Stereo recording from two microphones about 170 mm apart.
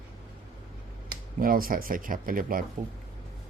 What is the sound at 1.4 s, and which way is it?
Speech, 55° right (ahead or behind).